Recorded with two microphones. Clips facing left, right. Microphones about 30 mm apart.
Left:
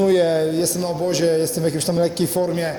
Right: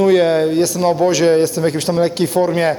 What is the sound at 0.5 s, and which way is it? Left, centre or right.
Speech, right.